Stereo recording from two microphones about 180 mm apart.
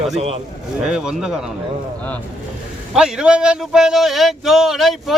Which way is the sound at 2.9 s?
5° right (ahead or behind).